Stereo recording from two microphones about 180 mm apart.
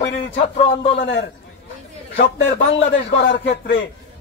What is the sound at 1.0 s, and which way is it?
Speech, 75° left (ahead or behind).